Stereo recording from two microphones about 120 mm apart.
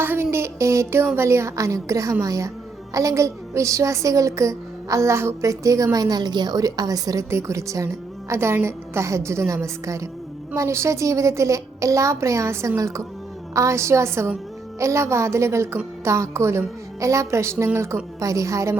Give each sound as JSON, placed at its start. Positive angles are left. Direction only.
{"t": 0.0, "sound": "a woman's voice", "side_deg": -20}